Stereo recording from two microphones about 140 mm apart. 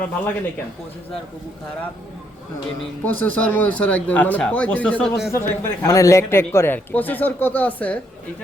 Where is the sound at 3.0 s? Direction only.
10° left (ahead or behind).